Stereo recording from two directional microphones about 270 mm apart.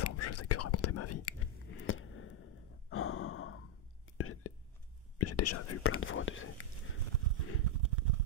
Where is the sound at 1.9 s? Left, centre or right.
Left.